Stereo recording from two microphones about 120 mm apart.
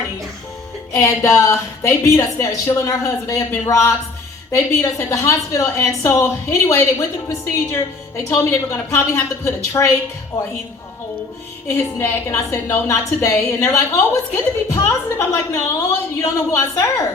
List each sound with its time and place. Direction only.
0.9 s a woman's voice: 25° left (ahead or behind)
11.9 s a woman's voice: 20° left (ahead or behind)